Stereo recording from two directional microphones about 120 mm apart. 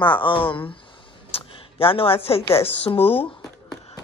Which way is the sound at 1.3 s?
50° left (ahead or behind).